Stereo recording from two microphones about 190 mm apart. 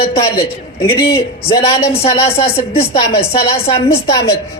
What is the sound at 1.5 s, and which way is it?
A man's voice, 30° left (ahead or behind).